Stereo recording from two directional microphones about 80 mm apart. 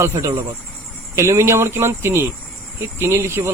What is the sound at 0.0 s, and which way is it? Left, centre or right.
Speech, right.